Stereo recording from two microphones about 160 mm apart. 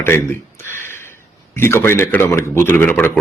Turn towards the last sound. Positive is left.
turn(degrees=15)  # may be behind; listen again after turning